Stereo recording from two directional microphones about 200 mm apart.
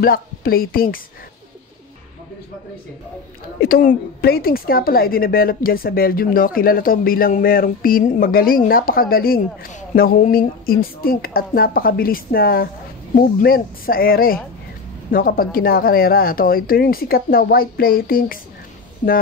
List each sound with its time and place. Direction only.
0.0 s a woman's voice: 45° left (ahead or behind)
3.6 s a woman's voice: 45° left (ahead or behind)